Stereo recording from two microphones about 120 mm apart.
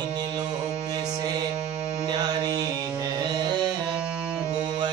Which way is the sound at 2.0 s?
35° right (ahead or behind).